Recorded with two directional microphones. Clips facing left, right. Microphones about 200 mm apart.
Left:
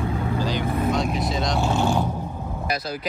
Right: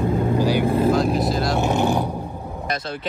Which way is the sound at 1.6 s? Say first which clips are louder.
Right 1 dB; 15° right (ahead or behind).